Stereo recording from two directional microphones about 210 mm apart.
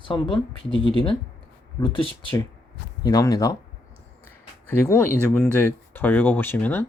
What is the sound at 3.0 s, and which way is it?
Speech, 15° left (ahead or behind).